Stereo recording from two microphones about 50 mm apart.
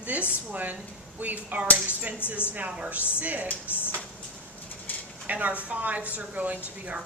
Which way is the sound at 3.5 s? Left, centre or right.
Left.